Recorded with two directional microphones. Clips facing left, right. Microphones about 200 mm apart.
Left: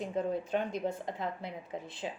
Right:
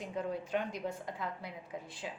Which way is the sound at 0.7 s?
25° left (ahead or behind).